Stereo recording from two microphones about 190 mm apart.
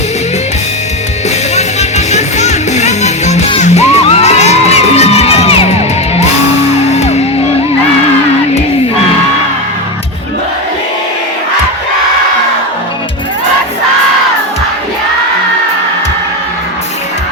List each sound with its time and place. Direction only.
1.5 s music: 35° left (ahead or behind)